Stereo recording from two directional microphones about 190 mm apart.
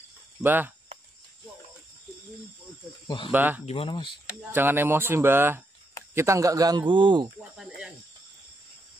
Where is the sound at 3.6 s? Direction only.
30° left (ahead or behind).